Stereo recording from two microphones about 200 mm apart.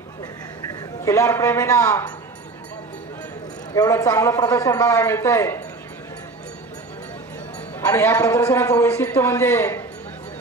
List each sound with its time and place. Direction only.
0.7 s a man's voice: 15° left (ahead or behind)
3.7 s a man's voice: 15° left (ahead or behind)
7.8 s a man's voice: 10° left (ahead or behind)